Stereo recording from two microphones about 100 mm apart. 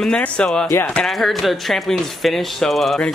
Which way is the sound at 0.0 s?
10° left (ahead or behind).